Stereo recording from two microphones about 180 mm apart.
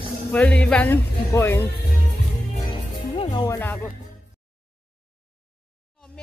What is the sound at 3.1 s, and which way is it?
Music, 30° left (ahead or behind).